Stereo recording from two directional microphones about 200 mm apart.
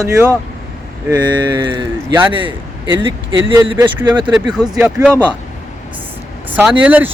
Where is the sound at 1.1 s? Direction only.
20° right (ahead or behind).